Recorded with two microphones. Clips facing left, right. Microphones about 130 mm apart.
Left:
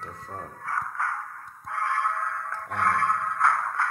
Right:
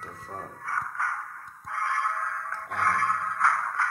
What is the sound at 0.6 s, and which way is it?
Music, 50° left (ahead or behind).